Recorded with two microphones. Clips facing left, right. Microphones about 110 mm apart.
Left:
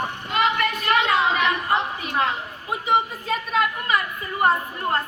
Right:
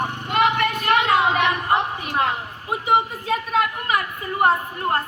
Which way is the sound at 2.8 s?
15° right (ahead or behind).